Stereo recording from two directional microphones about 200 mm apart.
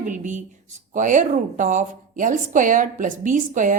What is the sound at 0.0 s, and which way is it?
A woman's voice, 40° right (ahead or behind).